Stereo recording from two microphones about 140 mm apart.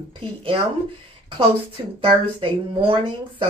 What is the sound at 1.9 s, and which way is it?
Speech, 40° right (ahead or behind).